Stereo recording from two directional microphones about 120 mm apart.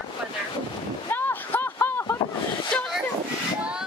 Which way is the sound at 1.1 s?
15° left (ahead or behind).